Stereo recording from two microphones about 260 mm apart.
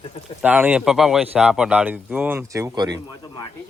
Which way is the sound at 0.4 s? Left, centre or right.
Centre.